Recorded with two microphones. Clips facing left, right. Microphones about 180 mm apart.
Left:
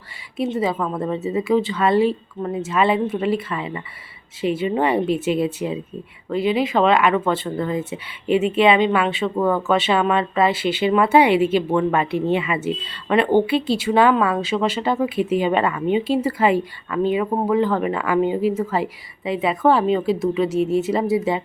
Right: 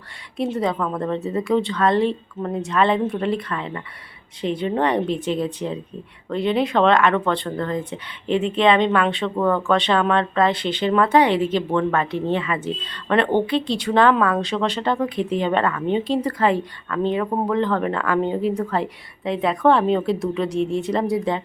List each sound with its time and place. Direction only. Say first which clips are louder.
0.3 s speech: left 1 dB; centre (ahead or behind)